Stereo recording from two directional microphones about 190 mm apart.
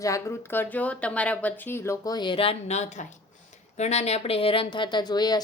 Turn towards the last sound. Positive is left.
turn(degrees=20)  # may be behind; listen again after turning